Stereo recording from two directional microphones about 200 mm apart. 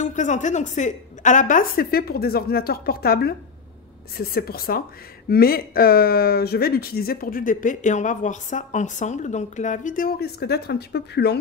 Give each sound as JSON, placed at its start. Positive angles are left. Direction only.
{"t": 0.0, "sound": "speech", "side_deg": 40}